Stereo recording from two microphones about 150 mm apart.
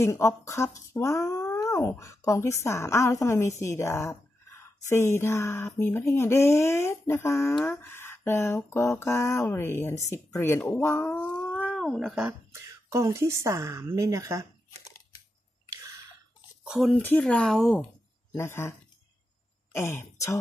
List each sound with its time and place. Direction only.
0.0 s speech: 20° left (ahead or behind)
11.2 s a sound: 10° left (ahead or behind)
12.3 s speech: 20° right (ahead or behind)
16.6 s speech: 5° right (ahead or behind)
17.0 s speech: 10° left (ahead or behind)
18.3 s speech: 15° left (ahead or behind)